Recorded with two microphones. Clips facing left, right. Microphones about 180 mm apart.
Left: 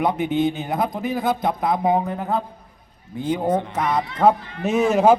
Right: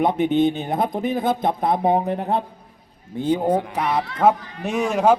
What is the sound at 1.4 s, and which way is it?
Speech, 30° right (ahead or behind).